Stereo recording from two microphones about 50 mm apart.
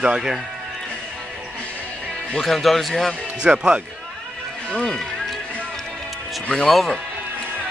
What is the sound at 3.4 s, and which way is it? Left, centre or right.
Speech, centre.